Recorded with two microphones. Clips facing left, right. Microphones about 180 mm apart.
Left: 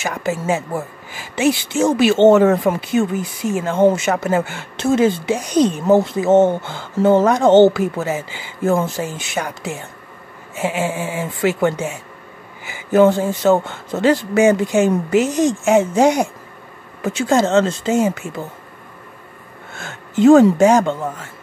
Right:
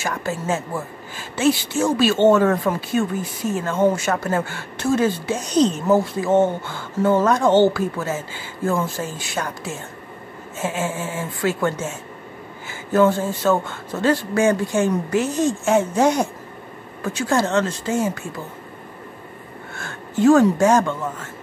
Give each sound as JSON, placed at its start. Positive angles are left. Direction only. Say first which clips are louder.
{"t": 0.0, "sound": "speech", "louder": "left 3 dB", "side_deg": 20}
{"t": 19.7, "sound": "speech", "louder": "left 3 dB", "side_deg": 20}